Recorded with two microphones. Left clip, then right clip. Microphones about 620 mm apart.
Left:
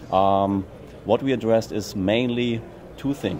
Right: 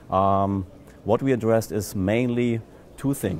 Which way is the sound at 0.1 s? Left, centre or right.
Right.